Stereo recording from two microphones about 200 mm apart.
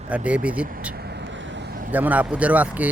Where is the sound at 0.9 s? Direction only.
55° right (ahead or behind).